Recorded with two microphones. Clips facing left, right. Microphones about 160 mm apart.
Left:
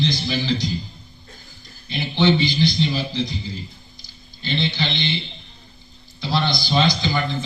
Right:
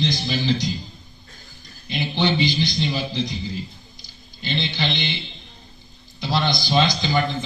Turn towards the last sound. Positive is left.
turn(degrees=-20)  # may be behind; listen again after turning